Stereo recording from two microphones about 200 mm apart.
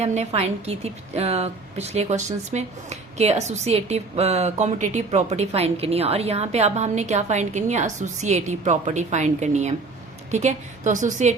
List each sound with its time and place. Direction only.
0.0 s a woman's voice: 35° right (ahead or behind)